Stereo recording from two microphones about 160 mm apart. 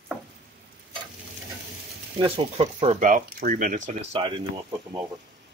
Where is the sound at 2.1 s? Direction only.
35° right (ahead or behind).